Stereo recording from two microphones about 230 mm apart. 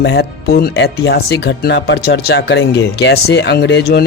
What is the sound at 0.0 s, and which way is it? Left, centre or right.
Speech, left.